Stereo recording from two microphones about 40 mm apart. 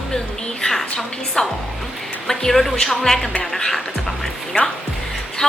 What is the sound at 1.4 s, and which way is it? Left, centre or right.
Speech, left.